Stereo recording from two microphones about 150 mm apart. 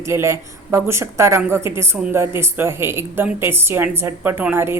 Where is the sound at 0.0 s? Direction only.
20° right (ahead or behind).